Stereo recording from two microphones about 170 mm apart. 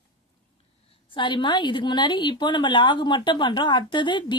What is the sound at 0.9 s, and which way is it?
A woman's voice, 30° left (ahead or behind).